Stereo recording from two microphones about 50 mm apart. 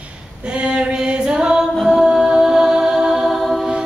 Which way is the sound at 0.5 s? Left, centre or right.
Right.